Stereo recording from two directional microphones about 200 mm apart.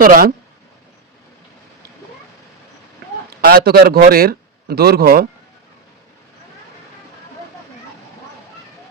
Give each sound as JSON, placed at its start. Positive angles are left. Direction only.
{"t": 0.0, "sound": "a man's voice", "side_deg": -45}
{"t": 3.4, "sound": "a man's voice", "side_deg": -50}